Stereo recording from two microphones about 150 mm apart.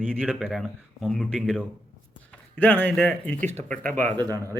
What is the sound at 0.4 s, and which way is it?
Speech, centre (ahead or behind).